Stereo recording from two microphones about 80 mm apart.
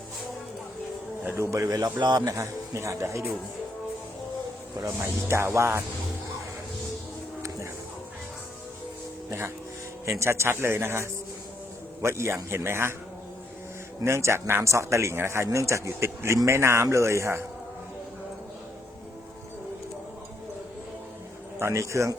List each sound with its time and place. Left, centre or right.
1.4 s speech: right
1.7 s a man's voice: right
2.4 s speech: right
4.9 s speech: right
10.1 s speech: right
14.0 s speech: right
21.6 s speech: right